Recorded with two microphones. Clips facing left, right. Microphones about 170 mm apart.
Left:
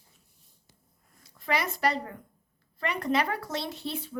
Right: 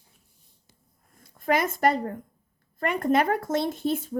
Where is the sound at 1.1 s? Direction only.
50° right (ahead or behind).